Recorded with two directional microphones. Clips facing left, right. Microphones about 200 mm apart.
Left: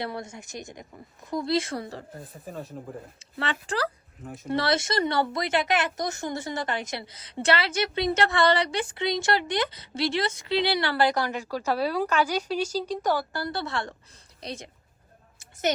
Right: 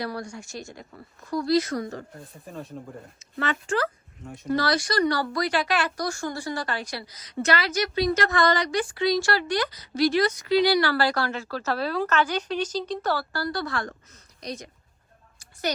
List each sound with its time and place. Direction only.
0.0 s speech: 25° left (ahead or behind)
2.1 s speech: centre (ahead or behind)
3.4 s speech: 35° left (ahead or behind)
4.2 s speech: centre (ahead or behind)
4.4 s speech: 25° left (ahead or behind)
15.4 s a sound: 20° left (ahead or behind)